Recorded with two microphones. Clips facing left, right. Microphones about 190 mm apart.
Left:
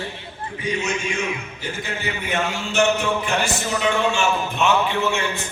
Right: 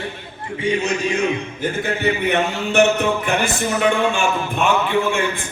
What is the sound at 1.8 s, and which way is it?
A man's voice, 60° right (ahead or behind).